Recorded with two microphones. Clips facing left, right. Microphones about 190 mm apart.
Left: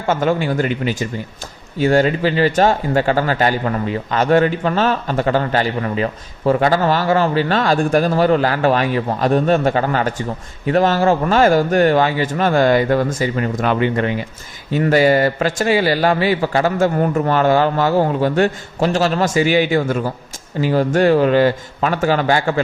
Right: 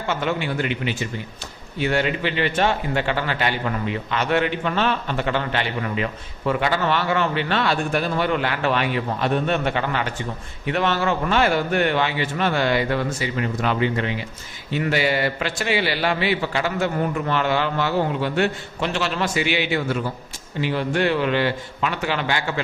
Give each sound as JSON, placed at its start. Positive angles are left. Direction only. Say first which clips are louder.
{"t": 0.1, "sound": "a man's voice", "louder": "left 7 dB", "side_deg": 45}